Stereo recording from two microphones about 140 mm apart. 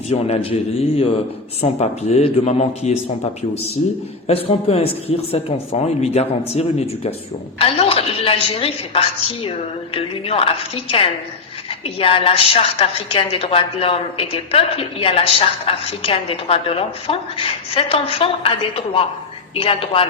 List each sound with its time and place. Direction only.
0.1 s a woman's voice: 50° left (ahead or behind)